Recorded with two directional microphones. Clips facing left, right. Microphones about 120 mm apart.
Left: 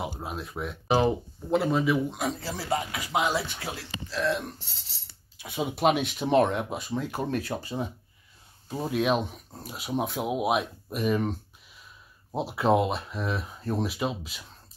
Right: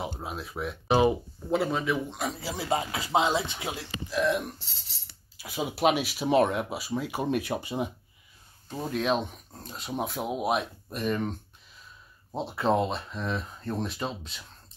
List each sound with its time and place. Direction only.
0.0 s speech: centre (ahead or behind)
2.4 s speech: 20° right (ahead or behind)
5.4 s speech: centre (ahead or behind)
8.6 s speech: 5° left (ahead or behind)